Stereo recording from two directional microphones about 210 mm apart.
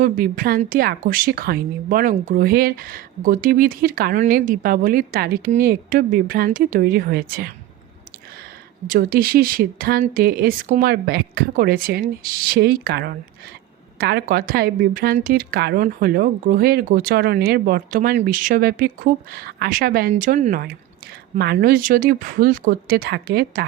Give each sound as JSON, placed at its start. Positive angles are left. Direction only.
{"t": 0.0, "sound": "speech", "side_deg": -40}
{"t": 8.9, "sound": "speech", "side_deg": -45}